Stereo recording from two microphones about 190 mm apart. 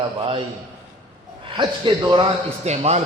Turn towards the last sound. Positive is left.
turn(degrees=-35)  # may be behind; listen again after turning